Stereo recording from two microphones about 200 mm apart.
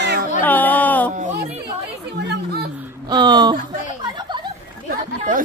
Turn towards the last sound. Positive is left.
turn(degrees=-40)  # may be behind; listen again after turning